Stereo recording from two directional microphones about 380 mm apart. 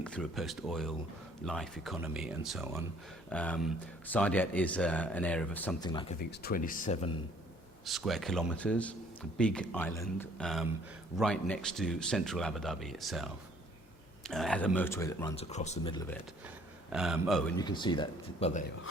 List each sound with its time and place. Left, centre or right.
0.0 s speech: centre
6.1 s speech: left
7.9 s speech: centre
16.9 s speech: centre